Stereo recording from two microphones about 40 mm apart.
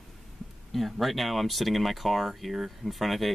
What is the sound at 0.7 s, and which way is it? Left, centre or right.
Speech, centre.